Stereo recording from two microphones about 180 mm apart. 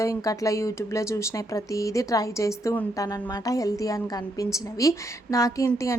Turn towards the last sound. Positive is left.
turn(degrees=15)  # may be behind; listen again after turning